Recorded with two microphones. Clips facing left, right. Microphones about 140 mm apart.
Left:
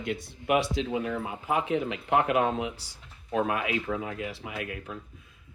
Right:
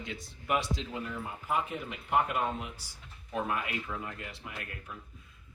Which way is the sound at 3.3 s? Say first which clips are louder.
Left 6 dB; 90° left.